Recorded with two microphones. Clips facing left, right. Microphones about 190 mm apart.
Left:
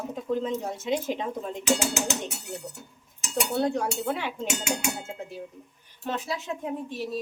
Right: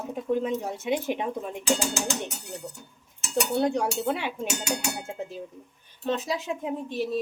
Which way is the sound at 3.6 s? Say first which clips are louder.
Even; 15° right (ahead or behind).